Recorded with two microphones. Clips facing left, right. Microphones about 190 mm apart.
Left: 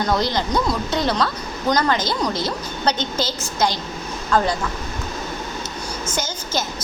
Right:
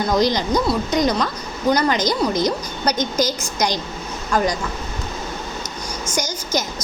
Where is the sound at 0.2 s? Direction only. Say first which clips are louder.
Right 3 dB; 15° right (ahead or behind).